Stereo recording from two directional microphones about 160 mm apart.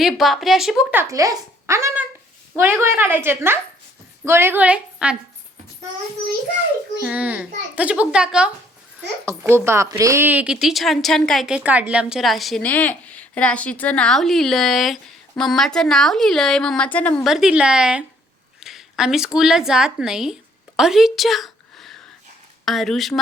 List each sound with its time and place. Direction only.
0.0 s a woman's voice: centre (ahead or behind)
7.0 s a child's voice: 10° right (ahead or behind); by 17.2 s 10° left (ahead or behind)
17.2 s a woman's voice: 5° right (ahead or behind)